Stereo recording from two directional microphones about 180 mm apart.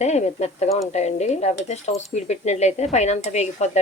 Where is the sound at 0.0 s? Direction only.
40° left (ahead or behind).